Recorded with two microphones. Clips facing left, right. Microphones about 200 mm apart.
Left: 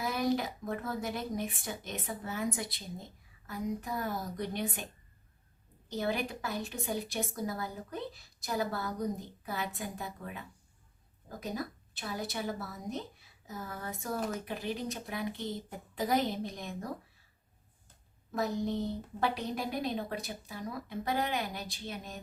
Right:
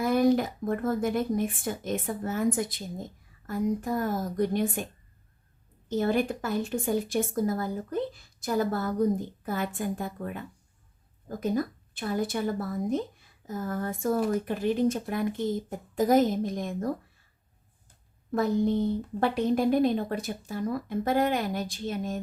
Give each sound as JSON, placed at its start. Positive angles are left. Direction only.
{"t": 0.0, "sound": "a woman's voice", "side_deg": -50}
{"t": 5.9, "sound": "a woman's voice", "side_deg": -50}
{"t": 18.3, "sound": "a woman's voice", "side_deg": -55}